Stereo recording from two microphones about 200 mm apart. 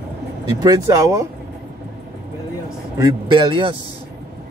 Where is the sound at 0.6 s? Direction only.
20° right (ahead or behind).